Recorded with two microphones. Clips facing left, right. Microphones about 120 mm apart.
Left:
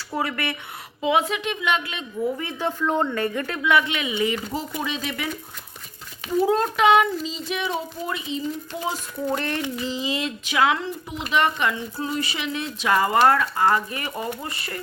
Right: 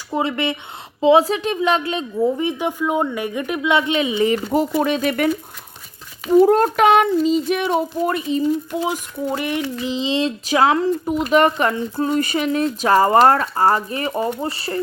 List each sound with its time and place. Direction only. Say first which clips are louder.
0.1 s speech: right 6 dB; 20° right (ahead or behind)
2.4 s speech: right 5 dB; 15° right (ahead or behind)
4.5 s speech: right 10 dB; 55° right (ahead or behind)
6.4 s speech: right 4 dB; 55° right (ahead or behind)
8.7 s speech: right 6 dB; 15° right (ahead or behind); by 14.8 s 30° right (ahead or behind)